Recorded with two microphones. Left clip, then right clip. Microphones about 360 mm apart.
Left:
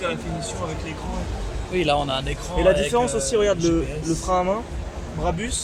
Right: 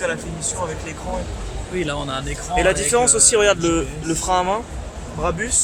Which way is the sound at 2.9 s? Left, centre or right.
Right.